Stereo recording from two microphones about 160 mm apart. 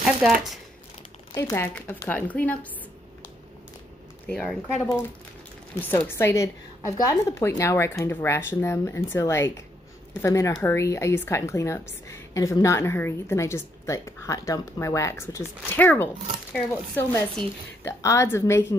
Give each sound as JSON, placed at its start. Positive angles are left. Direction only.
{"t": 0.2, "sound": "speech", "side_deg": -5}
{"t": 1.3, "sound": "a woman's voice", "side_deg": 15}
{"t": 4.3, "sound": "speech", "side_deg": 0}
{"t": 5.8, "sound": "a woman's voice", "side_deg": 10}